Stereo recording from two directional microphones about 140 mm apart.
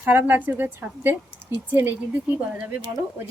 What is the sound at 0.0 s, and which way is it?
Speech, 15° right (ahead or behind).